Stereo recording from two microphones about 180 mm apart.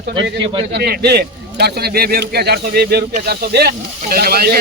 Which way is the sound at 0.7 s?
65° right (ahead or behind).